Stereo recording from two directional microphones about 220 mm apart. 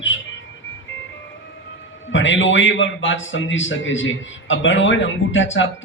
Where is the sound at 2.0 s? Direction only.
60° left (ahead or behind).